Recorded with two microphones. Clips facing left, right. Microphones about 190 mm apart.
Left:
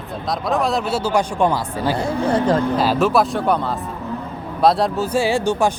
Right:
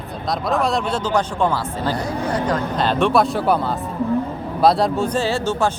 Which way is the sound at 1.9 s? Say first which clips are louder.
Left 6 dB; 25° left (ahead or behind).